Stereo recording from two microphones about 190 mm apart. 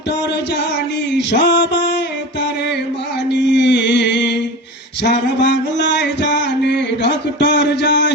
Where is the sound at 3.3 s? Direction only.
65° left (ahead or behind).